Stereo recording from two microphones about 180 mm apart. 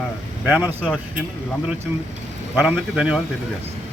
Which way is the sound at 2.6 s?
5° right (ahead or behind).